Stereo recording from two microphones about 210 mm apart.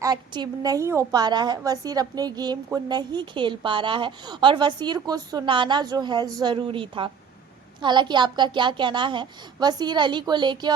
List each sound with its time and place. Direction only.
0.0 s a woman's voice: 20° right (ahead or behind)